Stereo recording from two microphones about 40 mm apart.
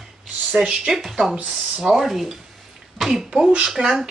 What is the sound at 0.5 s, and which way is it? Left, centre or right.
Speech, centre.